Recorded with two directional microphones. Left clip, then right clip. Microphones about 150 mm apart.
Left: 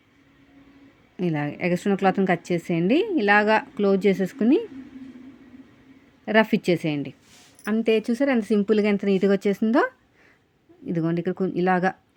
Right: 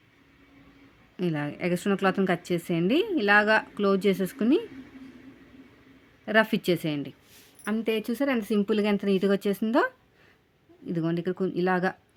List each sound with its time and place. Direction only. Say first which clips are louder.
1.1 s a woman's voice: left 3 dB; 10° left (ahead or behind)
6.2 s a woman's voice: left 3 dB; 10° left (ahead or behind)